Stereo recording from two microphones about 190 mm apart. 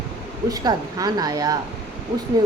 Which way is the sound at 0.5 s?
20° right (ahead or behind).